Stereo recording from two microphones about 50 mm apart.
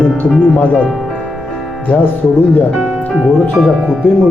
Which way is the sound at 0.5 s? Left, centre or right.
Left.